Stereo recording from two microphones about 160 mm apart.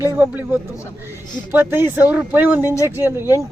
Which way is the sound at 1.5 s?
15° right (ahead or behind).